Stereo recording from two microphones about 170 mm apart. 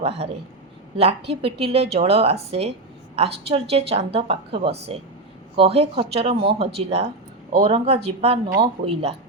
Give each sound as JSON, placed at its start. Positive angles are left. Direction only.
{"t": 0.9, "sound": "a woman's voice", "side_deg": -35}